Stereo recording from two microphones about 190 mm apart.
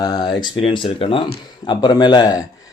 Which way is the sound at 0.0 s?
20° left (ahead or behind).